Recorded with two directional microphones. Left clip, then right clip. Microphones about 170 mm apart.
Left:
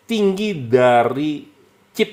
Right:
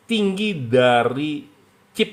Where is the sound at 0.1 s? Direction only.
25° left (ahead or behind).